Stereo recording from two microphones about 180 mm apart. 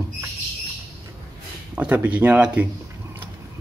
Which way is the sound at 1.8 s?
10° right (ahead or behind).